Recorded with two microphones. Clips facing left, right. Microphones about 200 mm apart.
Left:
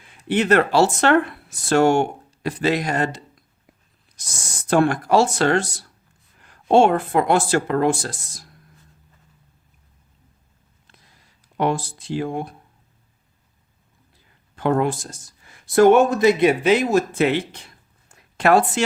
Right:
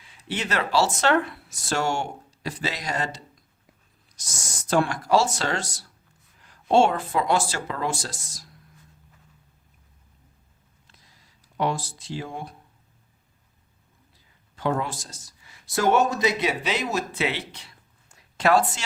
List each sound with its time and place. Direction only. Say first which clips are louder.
0.0 s speech: left 10 dB; 55° left (ahead or behind)
4.7 s speech: left 4 dB; 55° left (ahead or behind)
10.8 s a sound: left 4 dB; 55° left (ahead or behind)
11.5 s speech: left 5 dB; 55° left (ahead or behind)
14.5 s speech: left 7 dB; 55° left (ahead or behind)